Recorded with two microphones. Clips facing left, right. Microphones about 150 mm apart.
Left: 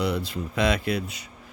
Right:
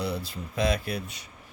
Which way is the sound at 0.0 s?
90° left.